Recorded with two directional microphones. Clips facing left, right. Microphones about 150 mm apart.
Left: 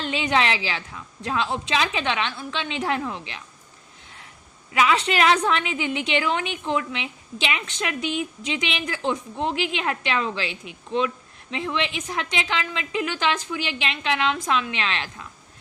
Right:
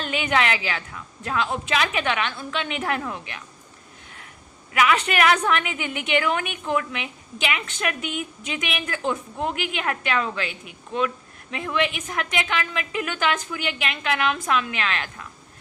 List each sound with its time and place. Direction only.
0.0 s a woman's voice: 25° left (ahead or behind)
4.7 s a woman's voice: 25° left (ahead or behind)